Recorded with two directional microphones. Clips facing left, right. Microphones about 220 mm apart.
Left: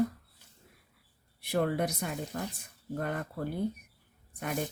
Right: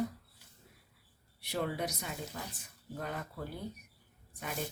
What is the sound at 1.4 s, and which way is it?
Speech, 55° left (ahead or behind).